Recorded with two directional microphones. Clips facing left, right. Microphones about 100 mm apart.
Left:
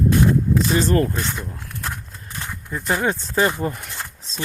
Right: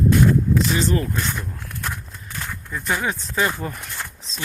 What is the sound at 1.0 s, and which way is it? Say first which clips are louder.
Speech: even; 30° left (ahead or behind).